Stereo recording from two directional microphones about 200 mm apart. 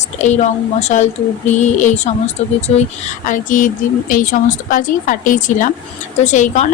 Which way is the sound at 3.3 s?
40° left (ahead or behind).